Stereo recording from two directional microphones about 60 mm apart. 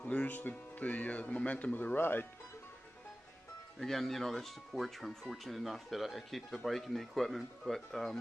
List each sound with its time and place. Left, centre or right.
0.0 s speech: centre; by 2.2 s left
3.8 s speech: centre